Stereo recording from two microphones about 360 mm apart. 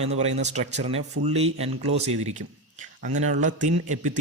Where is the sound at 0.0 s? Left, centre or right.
Centre.